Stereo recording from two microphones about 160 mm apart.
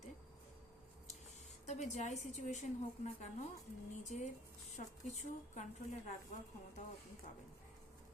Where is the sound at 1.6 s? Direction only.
45° left (ahead or behind).